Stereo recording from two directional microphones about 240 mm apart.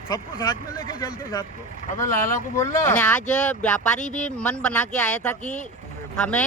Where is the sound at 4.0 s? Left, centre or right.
Left.